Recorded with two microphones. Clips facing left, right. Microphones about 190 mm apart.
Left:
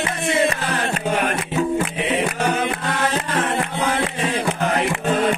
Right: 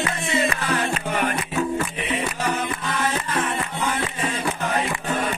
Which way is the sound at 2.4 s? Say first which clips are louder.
Left 4 dB; 70° left (ahead or behind).